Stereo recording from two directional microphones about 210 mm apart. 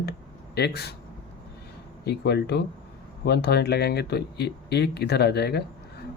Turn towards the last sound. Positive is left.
turn(degrees=50)  # may be behind; listen again after turning